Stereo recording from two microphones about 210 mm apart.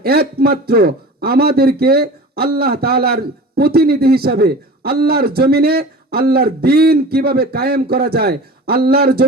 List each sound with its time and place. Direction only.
0.0 s a man's voice: 45° right (ahead or behind)